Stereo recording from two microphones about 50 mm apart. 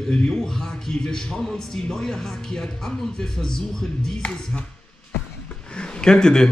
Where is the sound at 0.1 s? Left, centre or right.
Centre.